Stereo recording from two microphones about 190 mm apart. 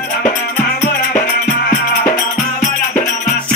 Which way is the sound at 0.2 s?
45° left (ahead or behind).